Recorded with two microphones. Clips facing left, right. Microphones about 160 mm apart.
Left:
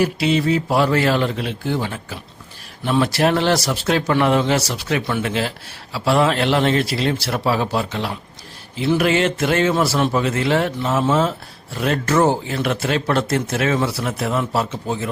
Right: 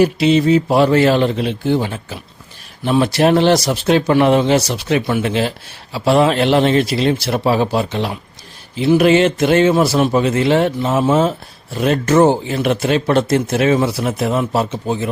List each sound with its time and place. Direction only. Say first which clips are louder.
0.0 s a man's voice: right 5 dB; 20° right (ahead or behind)